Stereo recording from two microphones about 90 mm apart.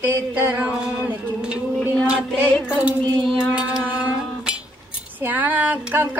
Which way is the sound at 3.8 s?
15° right (ahead or behind).